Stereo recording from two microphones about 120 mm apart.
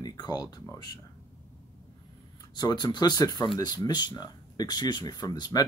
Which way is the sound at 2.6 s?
35° left (ahead or behind).